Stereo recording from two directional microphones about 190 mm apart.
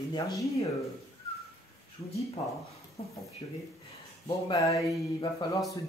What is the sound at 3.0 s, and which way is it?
Speech, 35° left (ahead or behind).